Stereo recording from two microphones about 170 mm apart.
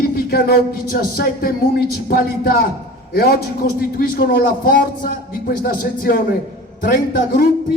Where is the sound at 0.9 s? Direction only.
60° left (ahead or behind).